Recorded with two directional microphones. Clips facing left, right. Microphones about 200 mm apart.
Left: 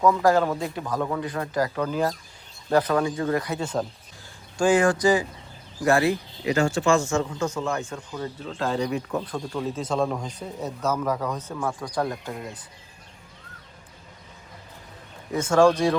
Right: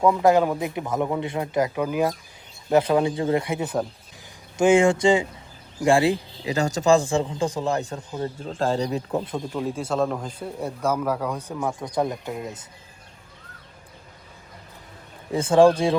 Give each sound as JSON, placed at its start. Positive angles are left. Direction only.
{"t": 0.1, "sound": "a man's voice", "side_deg": -20}
{"t": 6.6, "sound": "speech", "side_deg": -40}
{"t": 9.0, "sound": "speech", "side_deg": -25}
{"t": 9.6, "sound": "a man's voice", "side_deg": -10}
{"t": 15.3, "sound": "speech", "side_deg": -30}